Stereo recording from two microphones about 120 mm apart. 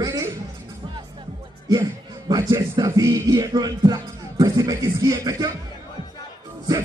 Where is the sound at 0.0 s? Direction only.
30° right (ahead or behind).